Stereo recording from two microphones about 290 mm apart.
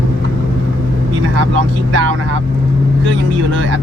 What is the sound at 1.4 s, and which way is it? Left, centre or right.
Vehicle, right.